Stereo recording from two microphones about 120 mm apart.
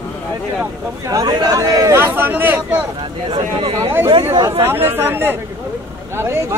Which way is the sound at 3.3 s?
45° right (ahead or behind).